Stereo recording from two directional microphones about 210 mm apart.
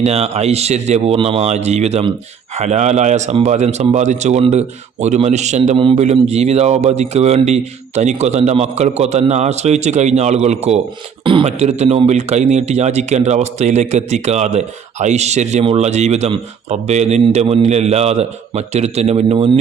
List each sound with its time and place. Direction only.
0.0 s a man's voice: 30° right (ahead or behind)